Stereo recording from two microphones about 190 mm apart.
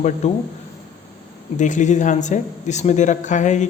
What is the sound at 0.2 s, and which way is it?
Speech, 35° left (ahead or behind).